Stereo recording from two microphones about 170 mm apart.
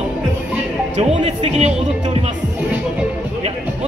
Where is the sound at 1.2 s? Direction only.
40° right (ahead or behind).